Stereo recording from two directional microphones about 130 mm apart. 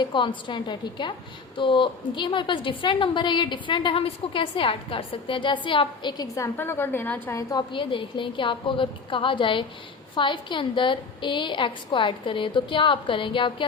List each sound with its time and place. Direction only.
0.0 s a woman's voice: 40° left (ahead or behind); by 7.4 s 15° left (ahead or behind)
7.5 s a woman's voice: 40° left (ahead or behind)